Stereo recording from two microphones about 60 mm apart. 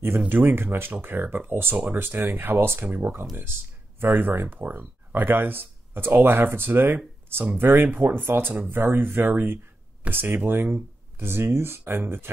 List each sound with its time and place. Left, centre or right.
0.3 s speech: right